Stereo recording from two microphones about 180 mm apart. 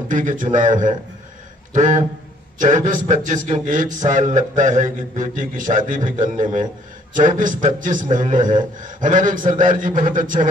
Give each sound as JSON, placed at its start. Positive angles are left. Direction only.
{"t": 0.1, "sound": "mantra", "side_deg": -45}